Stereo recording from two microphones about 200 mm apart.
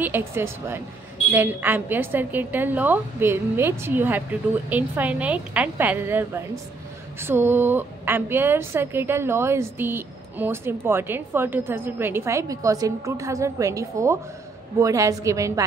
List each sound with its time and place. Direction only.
0.0 s a woman's voice: 10° right (ahead or behind)